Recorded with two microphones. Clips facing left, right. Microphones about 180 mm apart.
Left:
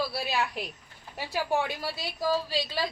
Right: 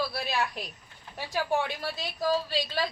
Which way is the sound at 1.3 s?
10° left (ahead or behind).